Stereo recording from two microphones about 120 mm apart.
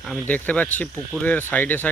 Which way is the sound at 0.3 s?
15° left (ahead or behind).